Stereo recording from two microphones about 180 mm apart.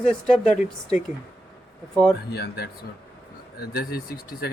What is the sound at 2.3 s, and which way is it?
Speech, 65° left (ahead or behind).